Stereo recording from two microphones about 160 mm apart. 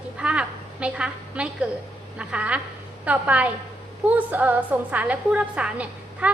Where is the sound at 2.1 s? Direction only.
5° right (ahead or behind).